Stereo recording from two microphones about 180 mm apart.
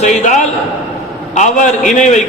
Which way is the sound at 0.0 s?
40° left (ahead or behind).